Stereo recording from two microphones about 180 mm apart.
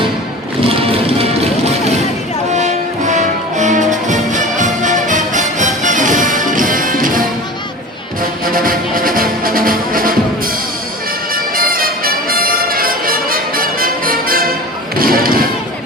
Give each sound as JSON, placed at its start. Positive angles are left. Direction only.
{"t": 0.7, "sound": "music", "side_deg": -30}
{"t": 11.5, "sound": "music", "side_deg": -55}
{"t": 14.9, "sound": "thump", "side_deg": -55}